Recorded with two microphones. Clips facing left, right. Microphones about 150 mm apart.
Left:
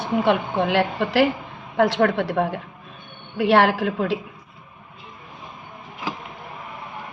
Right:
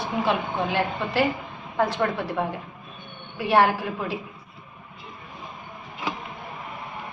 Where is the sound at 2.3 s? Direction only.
65° left (ahead or behind).